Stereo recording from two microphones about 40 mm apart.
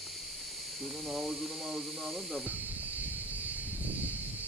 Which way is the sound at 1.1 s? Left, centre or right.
Centre.